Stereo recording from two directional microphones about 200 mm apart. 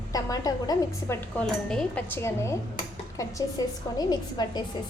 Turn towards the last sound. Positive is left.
turn(degrees=20)  # may be behind; listen again after turning